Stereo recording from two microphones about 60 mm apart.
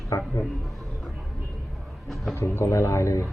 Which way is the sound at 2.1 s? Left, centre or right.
Centre.